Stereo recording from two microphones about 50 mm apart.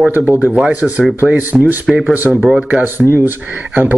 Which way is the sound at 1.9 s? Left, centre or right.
Centre.